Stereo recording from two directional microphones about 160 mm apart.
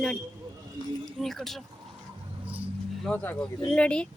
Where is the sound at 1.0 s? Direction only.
Centre (ahead or behind).